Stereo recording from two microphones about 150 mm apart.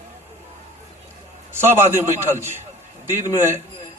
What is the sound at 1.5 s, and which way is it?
Speech, 15° right (ahead or behind).